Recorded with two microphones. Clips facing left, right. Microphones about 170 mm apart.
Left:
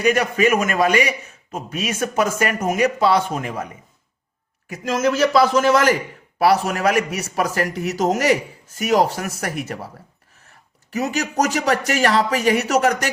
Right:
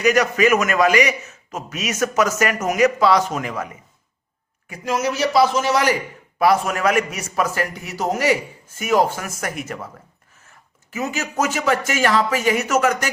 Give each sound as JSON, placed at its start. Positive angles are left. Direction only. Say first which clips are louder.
{"t": 0.0, "sound": "a man's voice", "louder": "right 1 dB", "side_deg": 30}
{"t": 4.9, "sound": "a man's voice", "louder": "left 2 dB", "side_deg": 50}
{"t": 6.4, "sound": "a man's voice", "louder": "even", "side_deg": 35}
{"t": 10.9, "sound": "a man's voice", "louder": "left 3 dB", "side_deg": 40}